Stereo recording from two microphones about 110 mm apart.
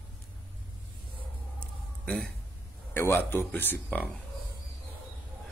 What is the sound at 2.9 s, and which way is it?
Speech, 20° left (ahead or behind).